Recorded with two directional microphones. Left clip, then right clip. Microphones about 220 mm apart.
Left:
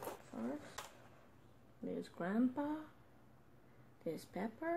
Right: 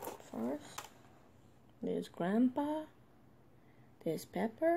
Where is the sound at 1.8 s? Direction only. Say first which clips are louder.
Right 6 dB; 35° right (ahead or behind).